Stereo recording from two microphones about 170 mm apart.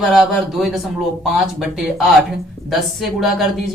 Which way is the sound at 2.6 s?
Centre (ahead or behind).